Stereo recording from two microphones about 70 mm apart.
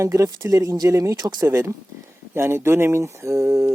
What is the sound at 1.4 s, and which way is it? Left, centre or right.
Speech, right.